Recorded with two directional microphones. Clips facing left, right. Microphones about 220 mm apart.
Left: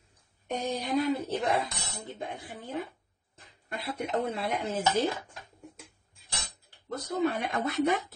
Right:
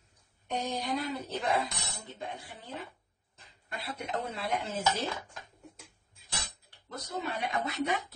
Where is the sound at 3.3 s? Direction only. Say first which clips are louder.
Left 4 dB; 50° left (ahead or behind).